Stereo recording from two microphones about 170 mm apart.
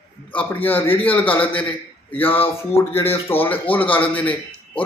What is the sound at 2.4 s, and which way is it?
Speech, 35° left (ahead or behind).